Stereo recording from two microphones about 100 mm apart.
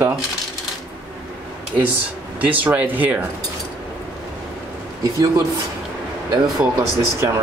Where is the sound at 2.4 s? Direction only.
15° right (ahead or behind).